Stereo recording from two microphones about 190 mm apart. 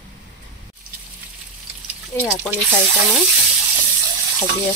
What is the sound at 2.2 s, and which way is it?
Speech, 5° right (ahead or behind).